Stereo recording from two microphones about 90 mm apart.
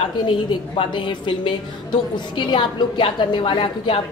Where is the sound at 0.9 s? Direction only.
60° left (ahead or behind).